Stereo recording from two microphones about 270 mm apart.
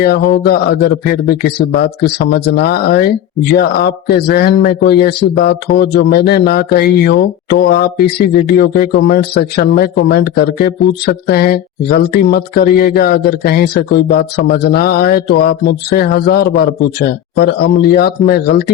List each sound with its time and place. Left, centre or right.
0.0 s speech: left